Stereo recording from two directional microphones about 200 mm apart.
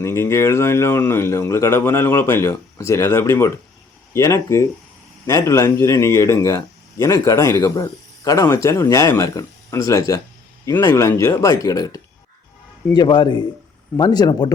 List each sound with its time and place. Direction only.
0.0 s a man's voice: 15° left (ahead or behind)